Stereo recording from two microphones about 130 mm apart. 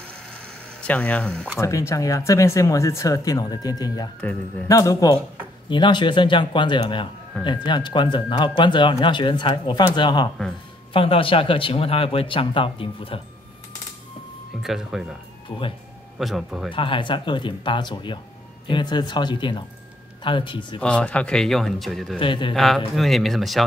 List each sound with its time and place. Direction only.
0.7 s speech: 10° left (ahead or behind)
1.6 s speech: 25° left (ahead or behind)
4.2 s speech: 10° left (ahead or behind)
4.6 s speech: 25° left (ahead or behind); by 13.2 s 45° left (ahead or behind)
14.6 s speech: 5° right (ahead or behind)
16.2 s speech: centre (ahead or behind)
16.7 s speech: 40° left (ahead or behind)
20.8 s speech: 10° left (ahead or behind)
22.2 s speech: 40° left (ahead or behind)
22.5 s speech: centre (ahead or behind)